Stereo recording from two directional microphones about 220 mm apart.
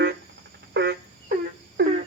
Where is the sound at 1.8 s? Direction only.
50° right (ahead or behind).